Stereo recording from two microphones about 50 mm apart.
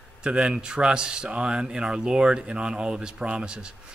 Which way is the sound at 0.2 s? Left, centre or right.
Centre.